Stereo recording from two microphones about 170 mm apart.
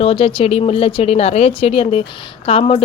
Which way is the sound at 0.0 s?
35° left (ahead or behind).